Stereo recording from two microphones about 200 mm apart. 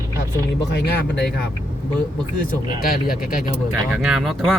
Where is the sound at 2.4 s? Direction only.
45° left (ahead or behind).